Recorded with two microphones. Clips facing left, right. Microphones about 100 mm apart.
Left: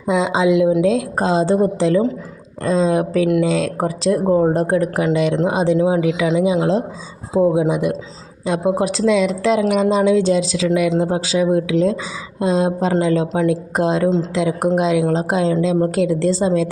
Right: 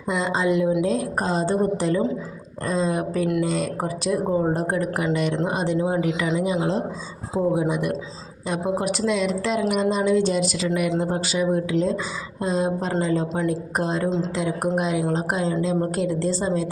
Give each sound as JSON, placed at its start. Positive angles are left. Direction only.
{"t": 0.1, "sound": "a woman's voice", "side_deg": 90}
{"t": 7.3, "sound": "speech", "side_deg": 75}
{"t": 8.8, "sound": "a woman's voice", "side_deg": 90}